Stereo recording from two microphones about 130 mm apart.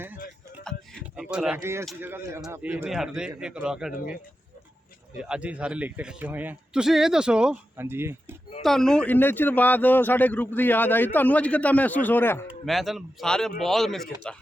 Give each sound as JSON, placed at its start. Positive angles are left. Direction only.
{"t": 0.6, "sound": "music", "side_deg": 5}
{"t": 1.2, "sound": "a man's voice", "side_deg": -5}
{"t": 2.9, "sound": "speech", "side_deg": -5}
{"t": 5.1, "sound": "a man's voice", "side_deg": -10}
{"t": 7.8, "sound": "a man's voice", "side_deg": -20}
{"t": 8.6, "sound": "speech", "side_deg": 5}
{"t": 12.6, "sound": "speech", "side_deg": 0}